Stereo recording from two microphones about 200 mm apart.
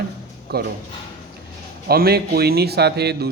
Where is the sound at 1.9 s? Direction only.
50° right (ahead or behind).